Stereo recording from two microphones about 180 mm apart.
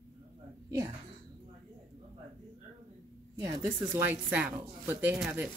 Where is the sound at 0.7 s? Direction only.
20° right (ahead or behind).